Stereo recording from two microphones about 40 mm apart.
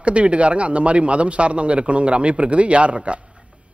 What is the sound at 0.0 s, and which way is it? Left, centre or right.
A man's voice, right.